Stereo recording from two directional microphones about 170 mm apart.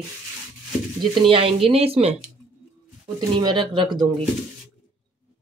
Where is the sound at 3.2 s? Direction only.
25° right (ahead or behind).